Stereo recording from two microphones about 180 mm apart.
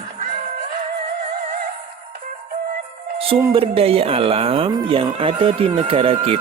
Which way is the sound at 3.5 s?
30° right (ahead or behind).